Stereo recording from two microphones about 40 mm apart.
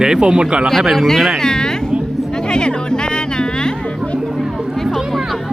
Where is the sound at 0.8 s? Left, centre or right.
Centre.